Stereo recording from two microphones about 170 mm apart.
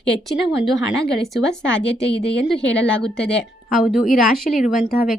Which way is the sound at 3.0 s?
5° left (ahead or behind).